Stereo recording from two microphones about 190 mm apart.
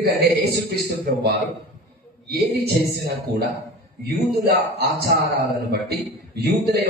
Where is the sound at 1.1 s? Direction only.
55° right (ahead or behind).